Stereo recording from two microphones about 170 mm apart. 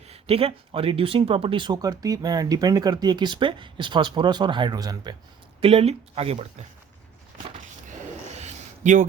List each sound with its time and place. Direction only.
0.1 s speech: 35° right (ahead or behind)
5.5 s speech: 35° right (ahead or behind)
7.9 s a sound: 40° right (ahead or behind)